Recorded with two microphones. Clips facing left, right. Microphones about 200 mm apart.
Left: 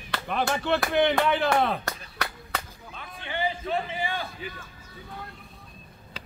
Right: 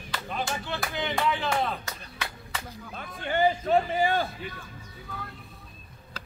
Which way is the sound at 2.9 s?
45° right (ahead or behind).